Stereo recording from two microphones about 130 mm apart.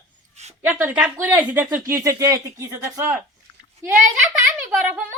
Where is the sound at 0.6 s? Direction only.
15° right (ahead or behind).